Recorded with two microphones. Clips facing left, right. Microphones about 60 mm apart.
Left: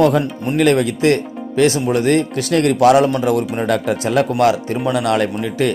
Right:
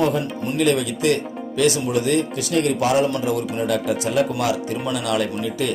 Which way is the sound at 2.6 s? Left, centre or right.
Left.